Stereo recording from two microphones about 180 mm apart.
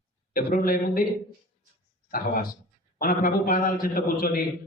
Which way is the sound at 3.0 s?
50° left (ahead or behind).